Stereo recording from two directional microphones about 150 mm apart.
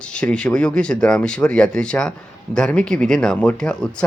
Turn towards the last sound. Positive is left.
turn(degrees=5)  # may be behind; listen again after turning